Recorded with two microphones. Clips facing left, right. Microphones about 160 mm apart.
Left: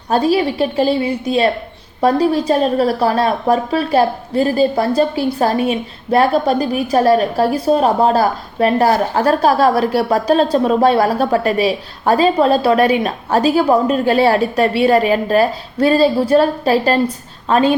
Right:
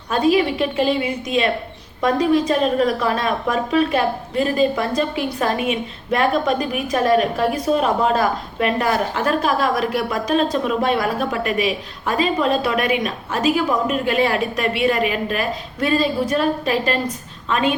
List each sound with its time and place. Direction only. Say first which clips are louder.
0.1 s a woman's voice: left 2 dB; 35° left (ahead or behind)